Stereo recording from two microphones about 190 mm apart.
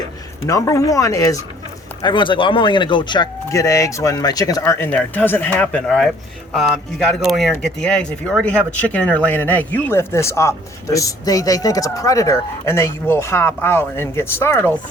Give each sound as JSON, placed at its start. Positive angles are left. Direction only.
{"t": 0.4, "sound": "speech", "side_deg": 15}